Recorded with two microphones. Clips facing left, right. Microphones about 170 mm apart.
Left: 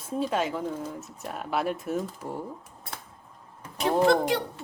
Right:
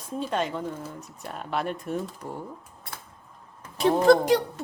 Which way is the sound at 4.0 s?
40° right (ahead or behind).